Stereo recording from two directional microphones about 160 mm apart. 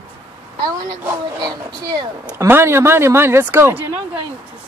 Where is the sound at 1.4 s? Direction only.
25° right (ahead or behind).